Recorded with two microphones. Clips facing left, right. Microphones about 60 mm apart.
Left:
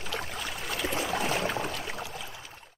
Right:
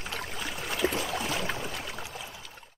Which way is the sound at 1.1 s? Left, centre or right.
Left.